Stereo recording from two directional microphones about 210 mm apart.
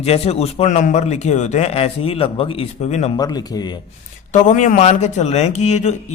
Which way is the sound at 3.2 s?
20° left (ahead or behind).